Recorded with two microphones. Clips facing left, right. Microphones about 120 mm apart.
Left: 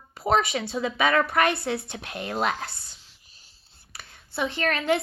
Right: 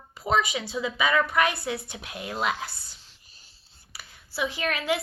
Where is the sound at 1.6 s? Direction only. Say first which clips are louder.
Left 3 dB; 55° left (ahead or behind).